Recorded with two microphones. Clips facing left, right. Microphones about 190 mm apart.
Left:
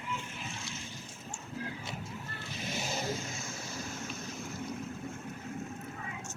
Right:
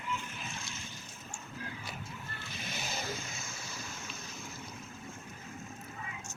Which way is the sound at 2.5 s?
35° left (ahead or behind).